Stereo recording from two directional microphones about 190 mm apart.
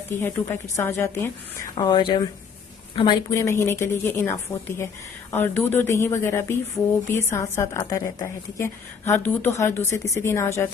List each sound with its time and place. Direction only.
0.1 s a woman's voice: 10° left (ahead or behind)